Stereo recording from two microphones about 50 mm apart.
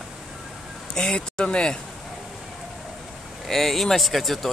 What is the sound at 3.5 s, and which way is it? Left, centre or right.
Speech, centre.